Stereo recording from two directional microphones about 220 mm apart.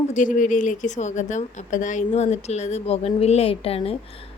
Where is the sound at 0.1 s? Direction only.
35° left (ahead or behind).